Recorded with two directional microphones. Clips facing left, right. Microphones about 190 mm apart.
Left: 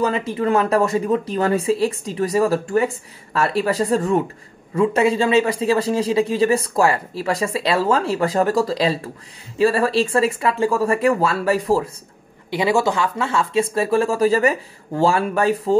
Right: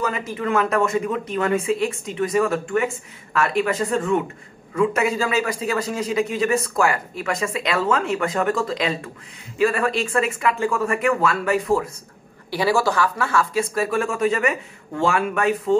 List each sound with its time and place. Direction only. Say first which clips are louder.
0.0 s a man's voice: left 5 dB; 30° left (ahead or behind)
12.4 s a man's voice: left 2 dB; 20° left (ahead or behind)